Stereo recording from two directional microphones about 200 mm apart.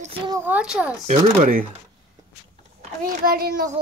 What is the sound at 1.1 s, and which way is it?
Speech, 40° right (ahead or behind).